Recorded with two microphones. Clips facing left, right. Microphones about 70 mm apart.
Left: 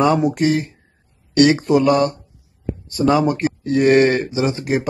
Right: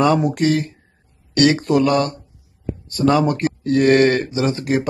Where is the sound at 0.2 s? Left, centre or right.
Centre.